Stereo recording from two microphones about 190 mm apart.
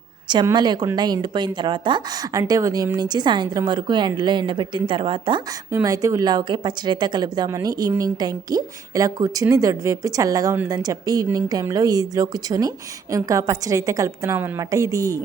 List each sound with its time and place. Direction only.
0.3 s a woman's voice: 25° right (ahead or behind)